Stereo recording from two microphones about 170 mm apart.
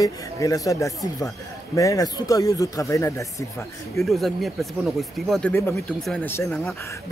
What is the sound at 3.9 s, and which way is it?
Speech, centre (ahead or behind).